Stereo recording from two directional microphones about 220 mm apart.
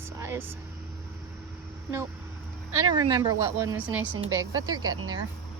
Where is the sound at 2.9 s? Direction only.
20° right (ahead or behind).